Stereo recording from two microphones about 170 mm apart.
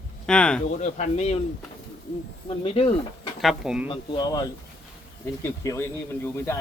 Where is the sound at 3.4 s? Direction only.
Centre (ahead or behind).